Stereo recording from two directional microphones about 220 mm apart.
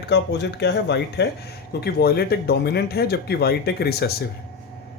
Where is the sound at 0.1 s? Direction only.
50° left (ahead or behind).